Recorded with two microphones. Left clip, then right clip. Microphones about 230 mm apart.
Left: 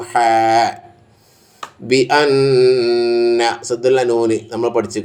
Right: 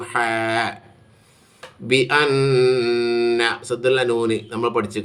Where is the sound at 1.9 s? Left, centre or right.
Centre.